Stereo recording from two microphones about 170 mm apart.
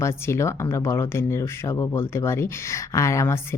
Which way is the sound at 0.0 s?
15° left (ahead or behind).